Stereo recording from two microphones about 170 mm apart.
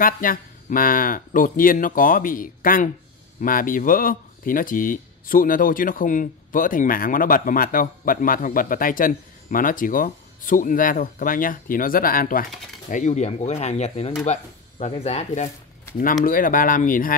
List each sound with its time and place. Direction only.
0.0 s speech: 55° left (ahead or behind)
12.9 s speech: 45° left (ahead or behind)
16.3 s speech: 55° left (ahead or behind)